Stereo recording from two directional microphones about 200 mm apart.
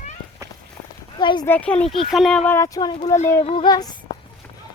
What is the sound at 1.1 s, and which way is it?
Speech, 25° left (ahead or behind).